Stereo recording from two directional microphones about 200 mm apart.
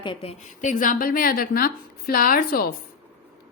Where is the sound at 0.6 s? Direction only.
40° left (ahead or behind).